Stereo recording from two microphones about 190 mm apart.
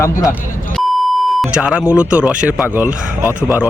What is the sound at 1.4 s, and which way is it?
Speech, 5° right (ahead or behind).